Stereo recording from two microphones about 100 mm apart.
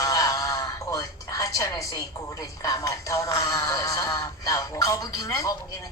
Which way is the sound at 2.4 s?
35° left (ahead or behind).